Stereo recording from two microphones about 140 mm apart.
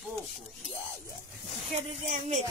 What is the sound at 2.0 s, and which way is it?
Speech, 60° right (ahead or behind).